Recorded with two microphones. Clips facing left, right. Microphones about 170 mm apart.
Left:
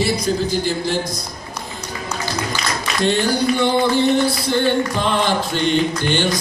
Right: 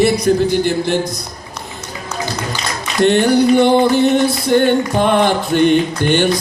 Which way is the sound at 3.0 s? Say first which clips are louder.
Right 7 dB; 60° right (ahead or behind).